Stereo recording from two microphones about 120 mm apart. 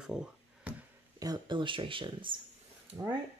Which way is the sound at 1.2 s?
35° right (ahead or behind).